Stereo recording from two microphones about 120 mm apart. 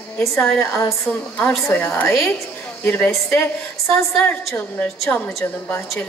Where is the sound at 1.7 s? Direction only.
15° left (ahead or behind).